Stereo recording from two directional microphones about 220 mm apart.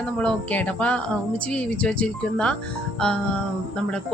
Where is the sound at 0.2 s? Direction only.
5° left (ahead or behind).